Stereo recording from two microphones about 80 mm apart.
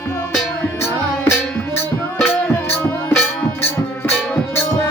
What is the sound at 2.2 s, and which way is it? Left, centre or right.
Music, left.